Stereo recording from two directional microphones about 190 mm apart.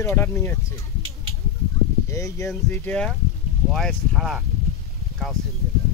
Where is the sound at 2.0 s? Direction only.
15° left (ahead or behind); by 4.5 s centre (ahead or behind).